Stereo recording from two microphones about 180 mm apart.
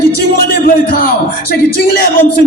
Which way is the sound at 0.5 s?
55° left (ahead or behind).